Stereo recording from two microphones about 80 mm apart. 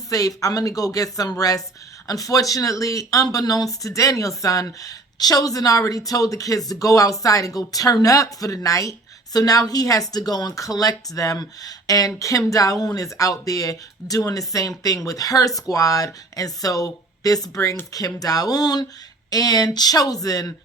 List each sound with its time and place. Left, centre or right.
0.1 s speech: left